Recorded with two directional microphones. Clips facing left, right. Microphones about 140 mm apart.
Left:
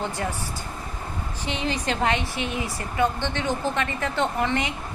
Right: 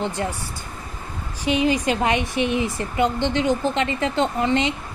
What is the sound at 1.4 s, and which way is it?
Speech, 15° right (ahead or behind).